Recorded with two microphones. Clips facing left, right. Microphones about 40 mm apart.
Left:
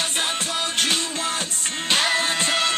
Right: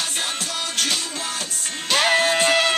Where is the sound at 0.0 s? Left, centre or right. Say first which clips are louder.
Left 2 dB; left.